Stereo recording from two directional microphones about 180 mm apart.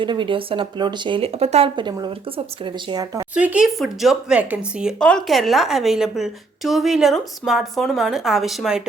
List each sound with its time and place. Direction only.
0.0 s speech: 25° right (ahead or behind)
3.3 s speech: 5° right (ahead or behind)